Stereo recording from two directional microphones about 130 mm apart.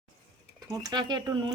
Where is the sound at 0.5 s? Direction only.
30° right (ahead or behind).